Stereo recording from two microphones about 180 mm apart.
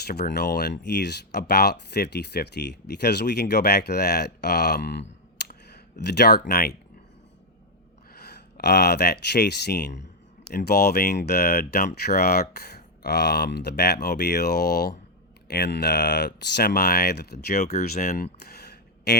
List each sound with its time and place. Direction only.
0.1 s speech: 65° left (ahead or behind)
5.5 s a sound: 65° left (ahead or behind)
8.1 s speech: 65° left (ahead or behind)
17.5 s speech: 40° left (ahead or behind)
17.9 s speech: 55° left (ahead or behind)
18.4 s a sound: 65° left (ahead or behind)